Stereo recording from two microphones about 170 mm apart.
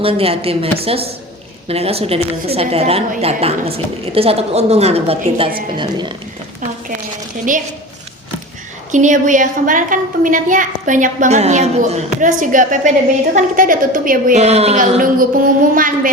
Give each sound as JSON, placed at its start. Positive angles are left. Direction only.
{"t": 0.0, "sound": "a woman's voice", "side_deg": -35}
{"t": 8.9, "sound": "a woman's voice", "side_deg": -45}